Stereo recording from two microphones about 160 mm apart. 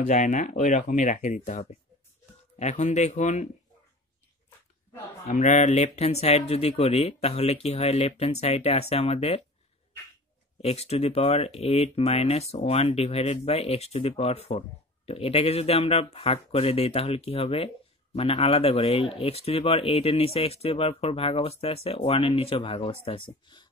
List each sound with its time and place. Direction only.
0.0 s speech: 50° left (ahead or behind)
5.2 s speech: 50° left (ahead or behind)
10.6 s speech: 40° left (ahead or behind)